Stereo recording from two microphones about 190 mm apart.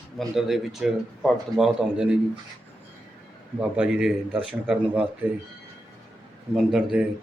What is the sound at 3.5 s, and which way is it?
Speech, 5° right (ahead or behind).